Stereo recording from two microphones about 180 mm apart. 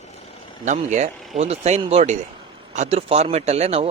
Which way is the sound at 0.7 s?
40° right (ahead or behind).